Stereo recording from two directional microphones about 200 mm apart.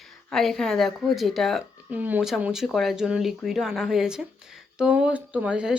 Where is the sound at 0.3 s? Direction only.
Centre (ahead or behind).